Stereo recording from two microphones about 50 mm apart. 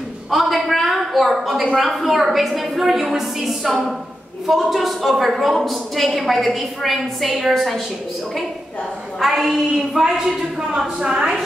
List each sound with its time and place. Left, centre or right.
0.3 s a sound: centre
1.8 s a woman's voice: centre
9.2 s a woman's voice: centre